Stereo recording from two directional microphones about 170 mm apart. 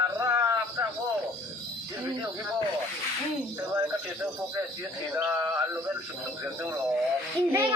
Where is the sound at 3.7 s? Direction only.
15° right (ahead or behind).